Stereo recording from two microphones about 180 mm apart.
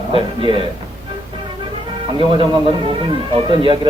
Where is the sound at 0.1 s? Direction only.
30° right (ahead or behind).